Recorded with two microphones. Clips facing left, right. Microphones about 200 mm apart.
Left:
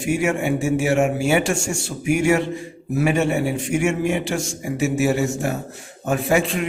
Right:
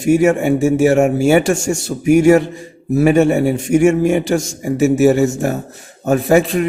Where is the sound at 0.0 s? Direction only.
40° right (ahead or behind).